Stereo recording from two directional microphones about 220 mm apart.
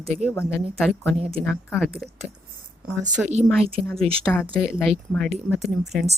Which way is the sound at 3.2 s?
Centre (ahead or behind).